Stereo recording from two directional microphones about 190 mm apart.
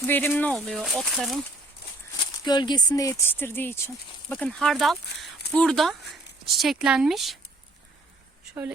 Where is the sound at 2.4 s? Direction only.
20° left (ahead or behind); by 7.4 s centre (ahead or behind).